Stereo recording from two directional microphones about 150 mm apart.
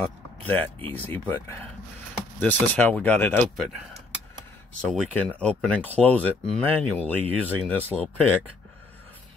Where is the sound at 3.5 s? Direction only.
Centre (ahead or behind).